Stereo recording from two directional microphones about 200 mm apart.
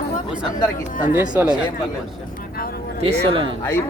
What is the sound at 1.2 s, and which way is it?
Speech, 10° right (ahead or behind).